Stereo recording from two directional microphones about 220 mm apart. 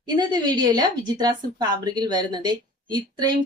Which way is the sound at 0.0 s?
20° right (ahead or behind).